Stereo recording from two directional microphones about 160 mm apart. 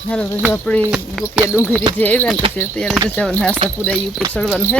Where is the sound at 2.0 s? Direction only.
10° left (ahead or behind).